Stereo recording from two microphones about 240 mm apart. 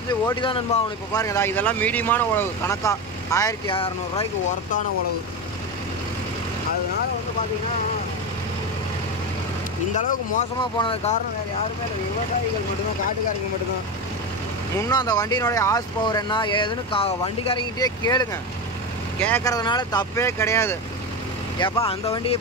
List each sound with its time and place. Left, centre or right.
0.1 s speech: centre
10.6 s speech: left
14.8 s speech: centre
19.2 s speech: centre